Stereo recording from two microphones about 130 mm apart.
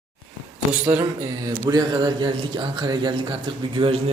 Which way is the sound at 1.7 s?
35° right (ahead or behind).